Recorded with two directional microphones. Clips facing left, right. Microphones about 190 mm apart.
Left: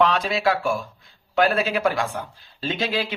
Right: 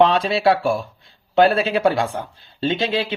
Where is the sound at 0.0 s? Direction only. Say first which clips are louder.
Right 4 dB; 30° right (ahead or behind).